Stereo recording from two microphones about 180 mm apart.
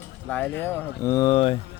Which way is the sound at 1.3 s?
30° left (ahead or behind).